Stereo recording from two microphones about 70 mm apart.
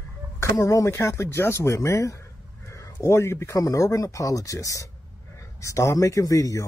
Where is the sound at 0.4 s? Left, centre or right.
Left.